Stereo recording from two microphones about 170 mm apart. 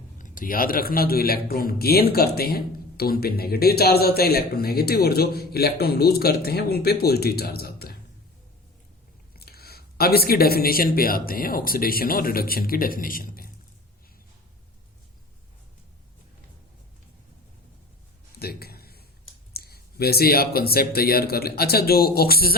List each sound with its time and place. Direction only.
0.2 s a man's voice: 55° left (ahead or behind)
9.4 s a man's voice: 65° left (ahead or behind)
18.3 s a sound: 65° left (ahead or behind)
19.5 s a man's voice: 65° left (ahead or behind)